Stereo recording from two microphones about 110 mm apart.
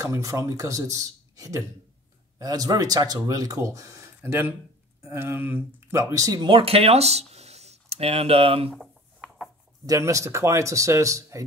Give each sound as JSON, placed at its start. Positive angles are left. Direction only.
{"t": 0.0, "sound": "speech", "side_deg": -30}
{"t": 6.5, "sound": "speech", "side_deg": -60}
{"t": 8.7, "sound": "a sound", "side_deg": -5}
{"t": 9.8, "sound": "speech", "side_deg": -30}